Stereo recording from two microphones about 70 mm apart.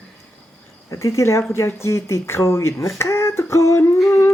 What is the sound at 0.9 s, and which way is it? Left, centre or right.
Speech, left.